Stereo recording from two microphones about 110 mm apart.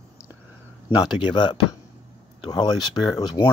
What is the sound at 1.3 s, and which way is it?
Speech, 40° left (ahead or behind).